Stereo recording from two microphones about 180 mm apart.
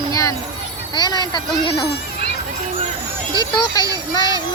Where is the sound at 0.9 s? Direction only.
20° left (ahead or behind).